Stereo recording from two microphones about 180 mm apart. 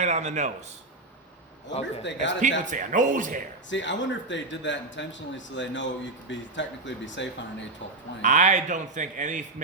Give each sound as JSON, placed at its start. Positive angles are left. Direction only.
{"t": 0.0, "sound": "speech", "side_deg": -40}
{"t": 1.8, "sound": "a man's voice", "side_deg": 85}
{"t": 2.6, "sound": "a man's voice", "side_deg": -45}
{"t": 3.7, "sound": "speech", "side_deg": 90}
{"t": 8.2, "sound": "a man's voice", "side_deg": -45}